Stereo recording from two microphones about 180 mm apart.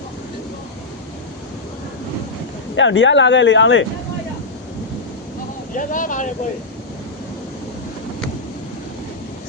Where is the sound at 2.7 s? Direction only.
90° left.